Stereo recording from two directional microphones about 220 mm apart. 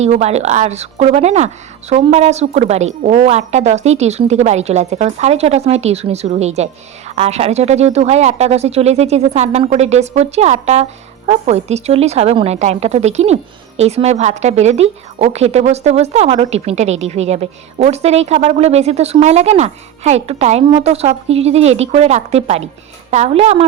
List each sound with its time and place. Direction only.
0.0 s a woman's voice: 30° right (ahead or behind)